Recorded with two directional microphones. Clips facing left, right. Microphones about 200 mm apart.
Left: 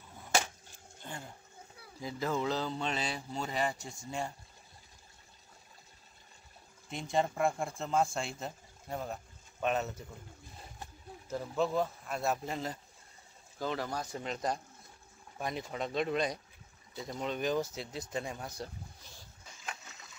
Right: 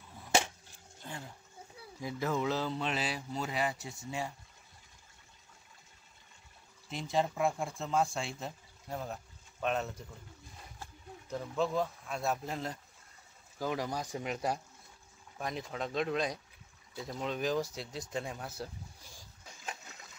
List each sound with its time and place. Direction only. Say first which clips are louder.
1.0 s speech: even; centre (ahead or behind)
6.9 s speech: even; centre (ahead or behind)
11.2 s speech: left 1 dB; 5° left (ahead or behind)
13.6 s speech: right 1 dB; 10° right (ahead or behind)
15.3 s speech: left 1 dB; centre (ahead or behind)